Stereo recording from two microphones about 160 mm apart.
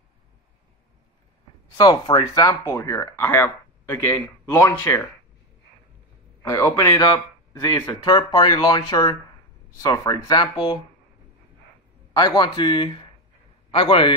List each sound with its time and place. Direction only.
1.8 s speech: 25° left (ahead or behind)
6.4 s speech: 20° left (ahead or behind)
12.2 s a man's voice: 25° left (ahead or behind)